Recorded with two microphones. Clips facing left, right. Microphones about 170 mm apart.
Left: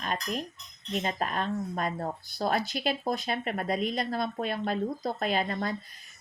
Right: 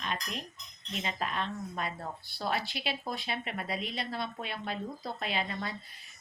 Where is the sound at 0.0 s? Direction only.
45° left (ahead or behind).